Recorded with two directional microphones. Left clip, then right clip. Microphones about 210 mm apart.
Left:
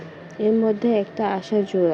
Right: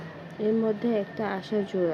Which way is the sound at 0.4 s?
15° left (ahead or behind).